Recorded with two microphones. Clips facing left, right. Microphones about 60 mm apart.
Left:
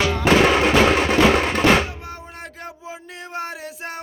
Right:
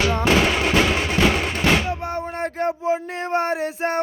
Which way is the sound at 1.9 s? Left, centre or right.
Right.